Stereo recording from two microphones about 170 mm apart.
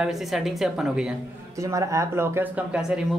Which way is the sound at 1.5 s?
20° right (ahead or behind).